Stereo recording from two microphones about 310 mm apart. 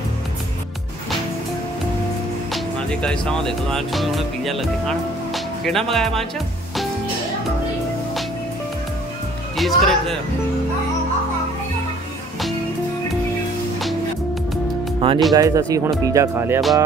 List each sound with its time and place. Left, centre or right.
2.5 s speech: centre
9.6 s speech: centre
15.0 s speech: centre